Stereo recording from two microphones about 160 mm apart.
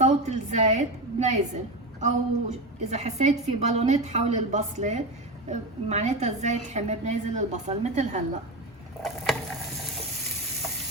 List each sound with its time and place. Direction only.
0.0 s a woman's voice: 45° right (ahead or behind)